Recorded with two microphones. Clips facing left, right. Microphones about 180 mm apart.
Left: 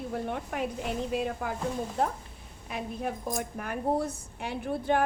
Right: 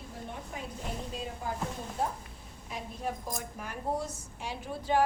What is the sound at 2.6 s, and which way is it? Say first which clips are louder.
A woman's voice: left 4 dB; 60° left (ahead or behind).